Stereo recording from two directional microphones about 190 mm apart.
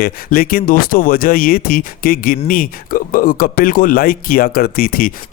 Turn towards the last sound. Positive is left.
turn(degrees=50)  # may be behind; listen again after turning